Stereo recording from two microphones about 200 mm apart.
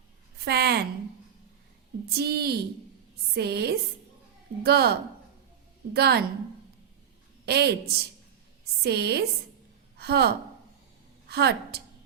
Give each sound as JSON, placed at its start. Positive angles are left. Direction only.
{"t": 0.3, "sound": "a woman's voice", "side_deg": -55}
{"t": 2.0, "sound": "a woman's voice", "side_deg": -50}
{"t": 7.4, "sound": "a woman's voice", "side_deg": -55}